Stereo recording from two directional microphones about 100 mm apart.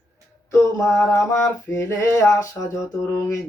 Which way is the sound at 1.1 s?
30° left (ahead or behind).